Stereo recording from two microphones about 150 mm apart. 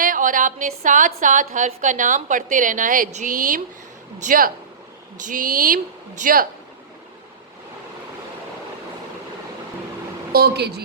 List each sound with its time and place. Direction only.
0.0 s a woman's voice: 65° right (ahead or behind)
10.3 s a woman's voice: 90° right